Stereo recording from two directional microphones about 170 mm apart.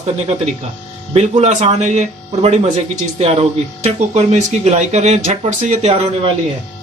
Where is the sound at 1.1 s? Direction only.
40° right (ahead or behind).